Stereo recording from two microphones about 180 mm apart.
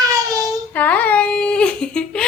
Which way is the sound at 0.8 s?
10° left (ahead or behind).